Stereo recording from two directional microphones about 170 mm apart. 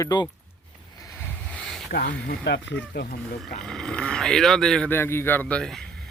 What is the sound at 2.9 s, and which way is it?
Speech, 70° left (ahead or behind).